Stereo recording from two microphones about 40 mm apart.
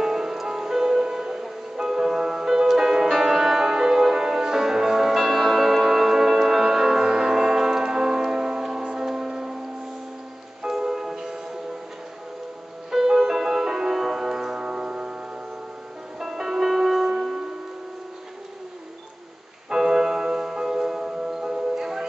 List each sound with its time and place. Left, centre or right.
0.0 s music: centre
10.7 s music: centre
12.9 s music: centre
16.2 s music: centre
19.7 s music: centre